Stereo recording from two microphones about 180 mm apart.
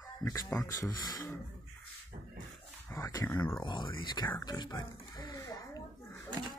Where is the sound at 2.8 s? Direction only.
20° left (ahead or behind).